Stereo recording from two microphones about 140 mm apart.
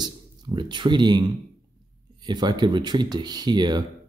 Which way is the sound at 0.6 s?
35° right (ahead or behind).